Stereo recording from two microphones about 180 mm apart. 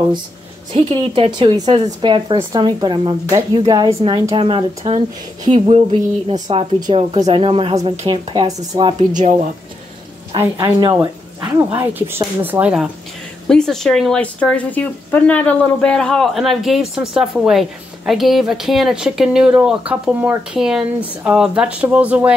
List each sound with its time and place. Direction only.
0.7 s speech: 30° right (ahead or behind)
9.1 s speech: 45° right (ahead or behind)
10.4 s speech: 20° right (ahead or behind)